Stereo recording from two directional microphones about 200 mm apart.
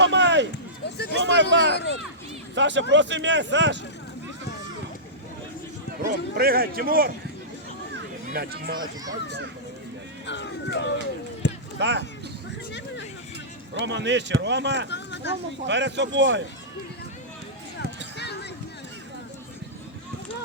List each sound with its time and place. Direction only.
0.0 s run: 60° right (ahead or behind)
0.9 s a sound: 55° left (ahead or behind)
1.1 s speech: 60° right (ahead or behind)
6.1 s a man's voice: 50° right (ahead or behind)
8.3 s a man's voice: 50° right (ahead or behind)
10.2 s speech: 60° left (ahead or behind)
11.4 s a sound: 60° left (ahead or behind)
11.8 s speech: 60° right (ahead or behind)
13.8 s speech: 65° right (ahead or behind)
14.8 s speech: 60° left (ahead or behind)
15.6 s speech: 60° right (ahead or behind)